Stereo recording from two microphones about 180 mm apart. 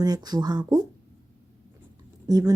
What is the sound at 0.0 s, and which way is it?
Speech, 20° right (ahead or behind).